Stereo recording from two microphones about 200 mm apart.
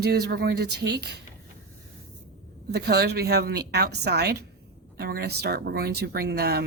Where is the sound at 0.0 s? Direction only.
55° right (ahead or behind).